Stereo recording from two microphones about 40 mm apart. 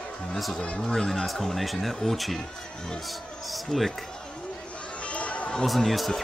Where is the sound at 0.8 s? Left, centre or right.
Centre.